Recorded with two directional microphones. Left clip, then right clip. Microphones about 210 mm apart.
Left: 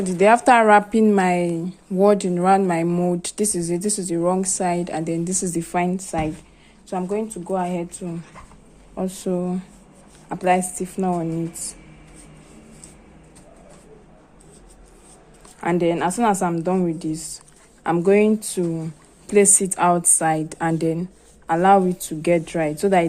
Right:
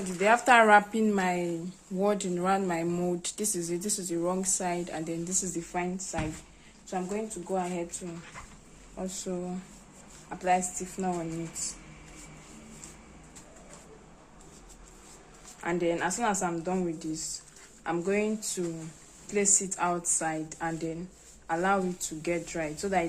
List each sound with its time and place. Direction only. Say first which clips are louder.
0.0 s a woman's voice: left 10 dB; 35° left (ahead or behind)
15.6 s a woman's voice: left 9 dB; 50° left (ahead or behind)